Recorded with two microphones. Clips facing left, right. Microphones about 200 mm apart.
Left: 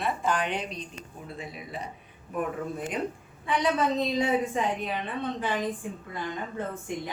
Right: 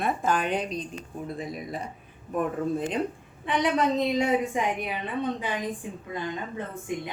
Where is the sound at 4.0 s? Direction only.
15° right (ahead or behind).